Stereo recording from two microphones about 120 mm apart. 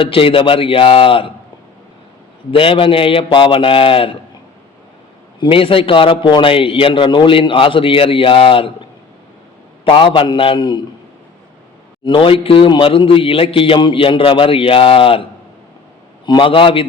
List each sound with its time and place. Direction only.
0.0 s a man's voice: 45° left (ahead or behind)
2.5 s a man's voice: 50° left (ahead or behind)
5.4 s a man's voice: 50° left (ahead or behind)
9.8 s a man's voice: 45° left (ahead or behind)
12.0 s a man's voice: 45° left (ahead or behind)